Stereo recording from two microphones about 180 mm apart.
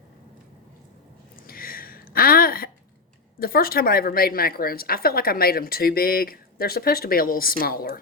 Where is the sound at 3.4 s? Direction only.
55° left (ahead or behind).